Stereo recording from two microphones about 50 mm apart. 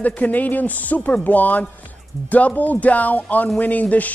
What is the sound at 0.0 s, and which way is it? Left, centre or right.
Speech, left.